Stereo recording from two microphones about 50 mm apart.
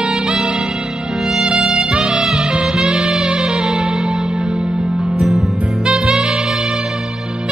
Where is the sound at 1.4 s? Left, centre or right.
Centre.